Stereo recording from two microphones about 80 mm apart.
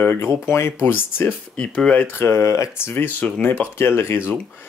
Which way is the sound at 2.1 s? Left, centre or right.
Left.